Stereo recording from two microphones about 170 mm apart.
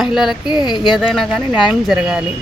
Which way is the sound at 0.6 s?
25° left (ahead or behind).